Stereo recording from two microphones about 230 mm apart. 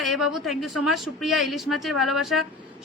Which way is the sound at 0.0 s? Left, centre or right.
Left.